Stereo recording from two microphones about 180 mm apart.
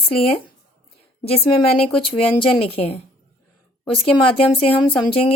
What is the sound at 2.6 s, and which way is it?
Speech, 35° left (ahead or behind).